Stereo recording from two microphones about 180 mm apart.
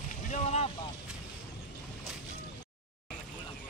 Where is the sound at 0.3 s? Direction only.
40° left (ahead or behind).